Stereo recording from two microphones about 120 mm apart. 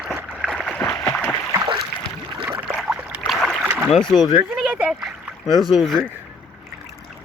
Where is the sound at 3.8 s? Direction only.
5° left (ahead or behind).